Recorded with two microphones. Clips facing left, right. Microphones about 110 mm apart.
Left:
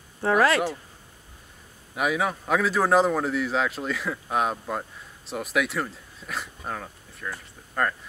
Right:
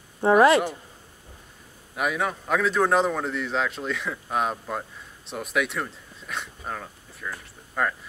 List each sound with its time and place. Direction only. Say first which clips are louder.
0.2 s speech: right 4 dB; 20° right (ahead or behind)
2.0 s speech: left 1 dB; centre (ahead or behind)